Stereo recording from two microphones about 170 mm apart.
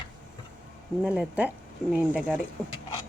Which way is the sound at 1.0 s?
5° right (ahead or behind).